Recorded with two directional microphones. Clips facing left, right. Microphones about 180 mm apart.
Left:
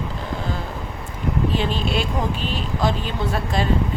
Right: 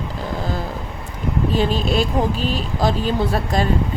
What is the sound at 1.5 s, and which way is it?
Speech, 40° right (ahead or behind).